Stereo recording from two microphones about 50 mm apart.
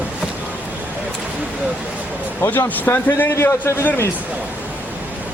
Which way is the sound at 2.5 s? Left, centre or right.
Left.